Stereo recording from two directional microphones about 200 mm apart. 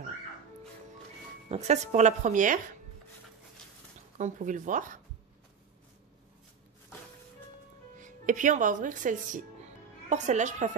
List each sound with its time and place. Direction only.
1.5 s speech: 35° right (ahead or behind)
4.2 s speech: 40° right (ahead or behind)
8.0 s speech: 40° right (ahead or behind)